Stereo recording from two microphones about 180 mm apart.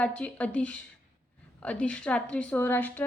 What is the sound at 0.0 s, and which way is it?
A woman's voice, 5° left (ahead or behind).